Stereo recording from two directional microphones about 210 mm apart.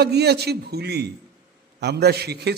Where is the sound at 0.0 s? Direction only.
50° right (ahead or behind).